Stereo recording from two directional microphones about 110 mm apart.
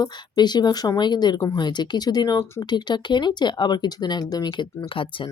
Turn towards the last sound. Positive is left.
turn(degrees=50)  # may be behind; listen again after turning